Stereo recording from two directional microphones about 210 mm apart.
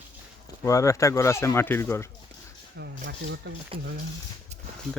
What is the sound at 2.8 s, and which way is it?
Speech, 55° right (ahead or behind).